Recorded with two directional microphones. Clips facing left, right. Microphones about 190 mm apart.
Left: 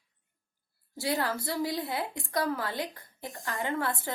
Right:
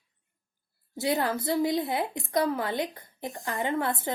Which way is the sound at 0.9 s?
20° right (ahead or behind).